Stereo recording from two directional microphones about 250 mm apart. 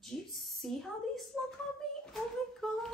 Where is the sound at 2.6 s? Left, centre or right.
Centre.